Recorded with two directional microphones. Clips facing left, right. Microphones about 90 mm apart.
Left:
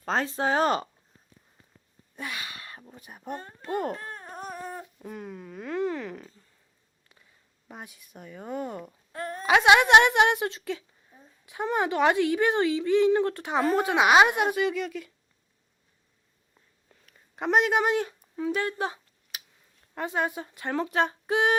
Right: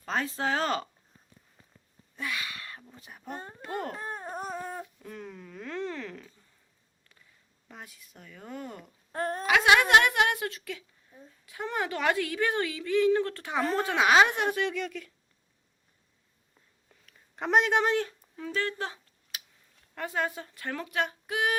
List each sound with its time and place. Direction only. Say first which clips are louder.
0.0 s speech: left 4 dB; 35° left (ahead or behind)
0.3 s a woman's voice: left 6 dB; 20° left (ahead or behind)
2.1 s a sound: right 1 dB; 25° left (ahead or behind)
3.1 s a woman's voice: left 3 dB; 20° left (ahead or behind)
3.9 s a sound: right 3 dB; 20° right (ahead or behind)
5.0 s a woman's voice: left 4 dB; 10° left (ahead or behind)
7.7 s a woman's voice: left 4 dB; 20° left (ahead or behind)
9.1 s speech: right 3 dB; 45° right (ahead or behind)
9.5 s a woman's voice: left 4 dB; 25° left (ahead or behind); by 15.1 s 5° left (ahead or behind)
16.9 s a sound: left 1 dB; 5° left (ahead or behind)
17.9 s speech: left 2 dB; 15° left (ahead or behind)
19.3 s a sound: left 1 dB; 5° left (ahead or behind)
20.0 s a woman's voice: left 3 dB; 20° left (ahead or behind)